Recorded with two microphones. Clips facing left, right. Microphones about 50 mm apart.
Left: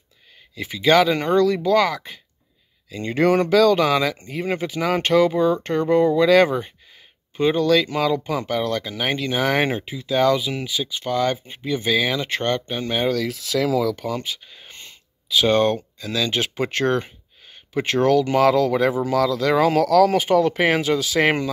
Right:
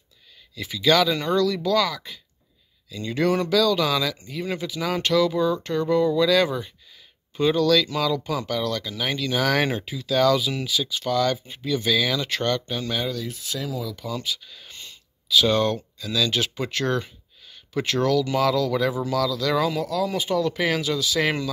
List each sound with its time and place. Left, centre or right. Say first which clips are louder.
0.6 s speech: left 3 dB; left
7.3 s speech: left 2 dB; left
9.3 s speech: left 1 dB; left
13.1 s speech: left 8 dB; left
14.0 s speech: left 3 dB; left
19.7 s speech: left 10 dB; left